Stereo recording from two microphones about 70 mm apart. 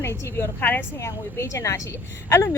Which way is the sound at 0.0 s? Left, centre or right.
Left.